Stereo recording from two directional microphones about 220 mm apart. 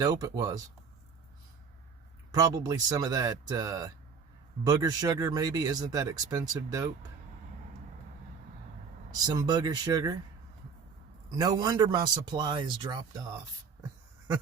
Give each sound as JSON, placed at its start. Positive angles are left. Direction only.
{"t": 0.0, "sound": "speech", "side_deg": -15}
{"t": 2.3, "sound": "speech", "side_deg": -15}
{"t": 9.1, "sound": "speech", "side_deg": -15}
{"t": 11.3, "sound": "a man's voice", "side_deg": -20}